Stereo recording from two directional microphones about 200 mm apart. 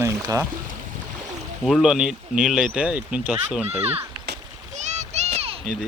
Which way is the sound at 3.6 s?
30° right (ahead or behind).